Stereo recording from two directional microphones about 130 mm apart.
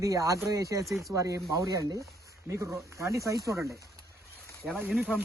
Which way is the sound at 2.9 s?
25° right (ahead or behind).